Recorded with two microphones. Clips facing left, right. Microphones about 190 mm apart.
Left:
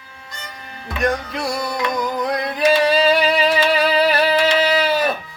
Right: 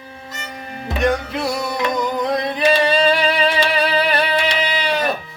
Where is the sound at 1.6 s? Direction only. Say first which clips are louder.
Right 1 dB; 25° right (ahead or behind).